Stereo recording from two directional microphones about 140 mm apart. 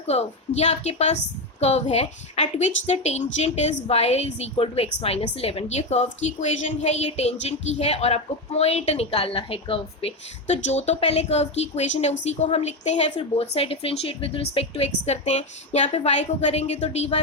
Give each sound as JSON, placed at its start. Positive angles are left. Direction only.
{"t": 0.1, "sound": "a woman's voice", "side_deg": 50}
{"t": 10.4, "sound": "a woman's voice", "side_deg": 55}